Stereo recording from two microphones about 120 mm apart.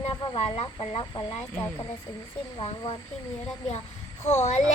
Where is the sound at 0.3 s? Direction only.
55° left (ahead or behind).